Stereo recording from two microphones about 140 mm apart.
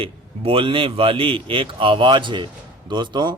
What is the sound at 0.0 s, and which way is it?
Speech, 40° right (ahead or behind).